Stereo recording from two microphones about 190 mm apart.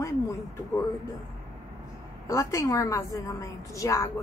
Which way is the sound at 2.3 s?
15° left (ahead or behind).